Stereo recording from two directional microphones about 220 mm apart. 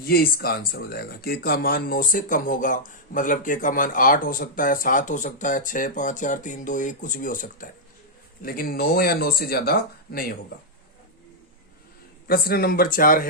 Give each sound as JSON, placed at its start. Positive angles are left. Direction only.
{"t": 0.0, "sound": "speech", "side_deg": 45}
{"t": 12.3, "sound": "speech", "side_deg": 45}